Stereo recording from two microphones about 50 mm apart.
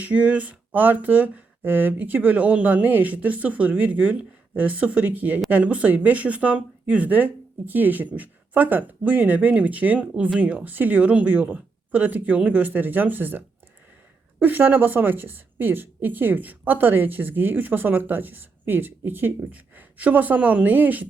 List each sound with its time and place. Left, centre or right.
0.0 s a woman's voice: right
14.4 s a woman's voice: right